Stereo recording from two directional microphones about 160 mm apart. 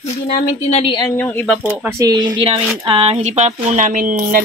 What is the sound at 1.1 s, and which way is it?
Speech, 10° left (ahead or behind).